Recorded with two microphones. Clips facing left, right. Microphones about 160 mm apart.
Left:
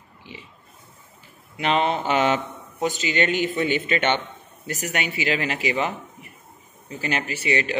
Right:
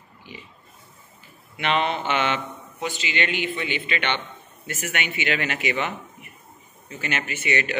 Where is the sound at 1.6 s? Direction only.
35° left (ahead or behind).